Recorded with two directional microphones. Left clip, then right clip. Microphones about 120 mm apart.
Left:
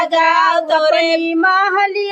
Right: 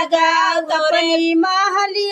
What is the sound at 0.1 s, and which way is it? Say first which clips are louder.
Child singing: left 2 dB; 45° left (ahead or behind).